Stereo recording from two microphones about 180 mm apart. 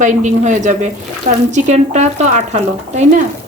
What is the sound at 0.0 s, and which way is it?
A woman's voice, 45° right (ahead or behind).